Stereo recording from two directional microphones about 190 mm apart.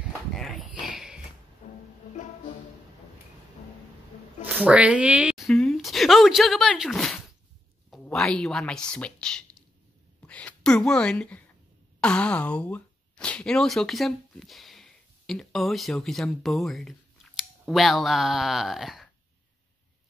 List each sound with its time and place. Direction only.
0.3 s a sound: centre (ahead or behind)
1.6 s music: 35° left (ahead or behind)
4.5 s a woman's voice: 5° right (ahead or behind)